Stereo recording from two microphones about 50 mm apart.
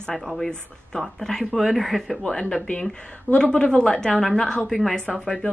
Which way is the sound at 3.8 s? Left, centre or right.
Centre.